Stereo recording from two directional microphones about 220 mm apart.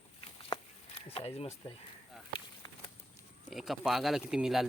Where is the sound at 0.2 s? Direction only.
25° left (ahead or behind).